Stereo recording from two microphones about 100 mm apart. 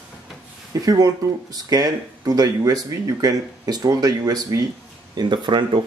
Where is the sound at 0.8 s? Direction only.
40° right (ahead or behind).